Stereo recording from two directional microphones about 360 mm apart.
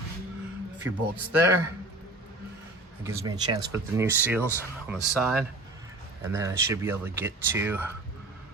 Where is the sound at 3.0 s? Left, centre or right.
Centre.